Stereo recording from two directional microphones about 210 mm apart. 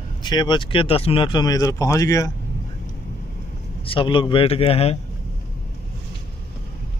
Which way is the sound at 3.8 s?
25° left (ahead or behind).